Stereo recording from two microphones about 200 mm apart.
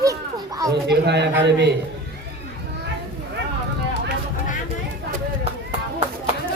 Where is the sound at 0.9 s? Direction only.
60° right (ahead or behind).